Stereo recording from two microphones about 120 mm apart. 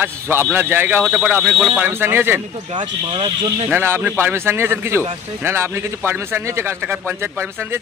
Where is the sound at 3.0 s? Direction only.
45° right (ahead or behind).